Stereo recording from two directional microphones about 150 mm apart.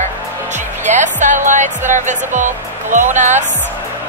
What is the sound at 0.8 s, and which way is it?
Music, 55° right (ahead or behind).